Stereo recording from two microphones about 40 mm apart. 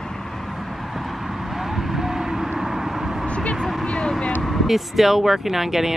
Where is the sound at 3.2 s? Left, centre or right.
Left.